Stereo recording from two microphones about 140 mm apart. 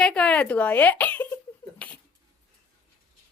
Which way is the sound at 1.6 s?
35° left (ahead or behind).